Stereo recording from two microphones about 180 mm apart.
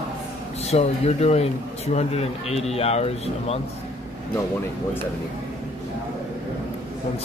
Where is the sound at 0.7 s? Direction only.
35° left (ahead or behind).